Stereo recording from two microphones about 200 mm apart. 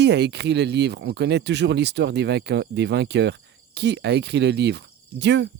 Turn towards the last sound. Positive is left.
turn(degrees=-60)  # may be behind; listen again after turning